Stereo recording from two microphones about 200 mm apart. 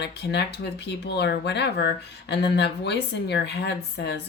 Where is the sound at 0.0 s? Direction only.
55° left (ahead or behind).